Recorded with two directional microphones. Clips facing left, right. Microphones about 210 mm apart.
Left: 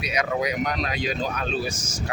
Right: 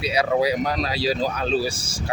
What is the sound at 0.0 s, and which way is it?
Speech, 30° right (ahead or behind).